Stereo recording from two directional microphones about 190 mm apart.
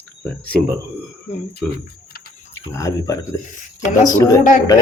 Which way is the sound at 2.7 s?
15° left (ahead or behind).